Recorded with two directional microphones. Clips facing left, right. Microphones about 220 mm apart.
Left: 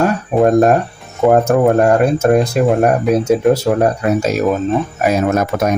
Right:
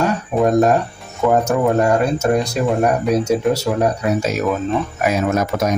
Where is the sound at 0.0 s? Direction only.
50° left (ahead or behind).